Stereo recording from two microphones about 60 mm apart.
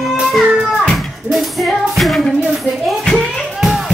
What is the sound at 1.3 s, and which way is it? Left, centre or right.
Music, centre.